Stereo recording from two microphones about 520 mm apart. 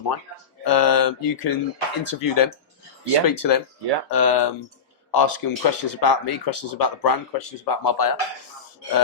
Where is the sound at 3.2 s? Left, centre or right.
Left.